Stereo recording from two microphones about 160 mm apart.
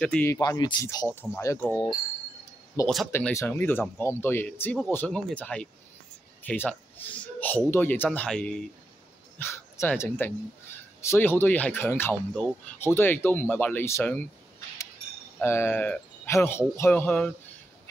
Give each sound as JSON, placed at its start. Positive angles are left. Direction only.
{"t": 0.0, "sound": "speech", "side_deg": 10}
{"t": 0.4, "sound": "speech", "side_deg": 25}
{"t": 3.1, "sound": "speech", "side_deg": 15}
{"t": 15.4, "sound": "speech", "side_deg": 15}